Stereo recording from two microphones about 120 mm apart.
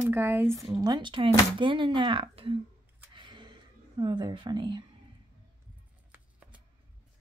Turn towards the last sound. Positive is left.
turn(degrees=-10)  # may be behind; listen again after turning